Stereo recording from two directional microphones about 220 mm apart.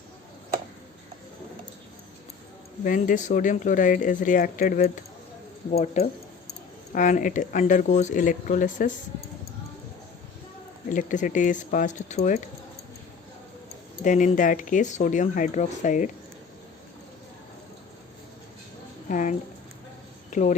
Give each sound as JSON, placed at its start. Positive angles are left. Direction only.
{"t": 2.8, "sound": "speech", "side_deg": 35}
{"t": 10.8, "sound": "speech", "side_deg": 35}
{"t": 14.0, "sound": "speech", "side_deg": 35}
{"t": 19.0, "sound": "speech", "side_deg": 35}